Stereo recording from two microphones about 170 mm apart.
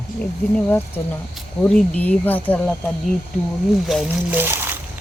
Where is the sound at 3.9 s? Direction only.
5° right (ahead or behind).